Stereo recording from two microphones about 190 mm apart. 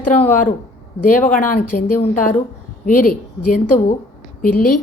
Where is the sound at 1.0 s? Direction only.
45° left (ahead or behind).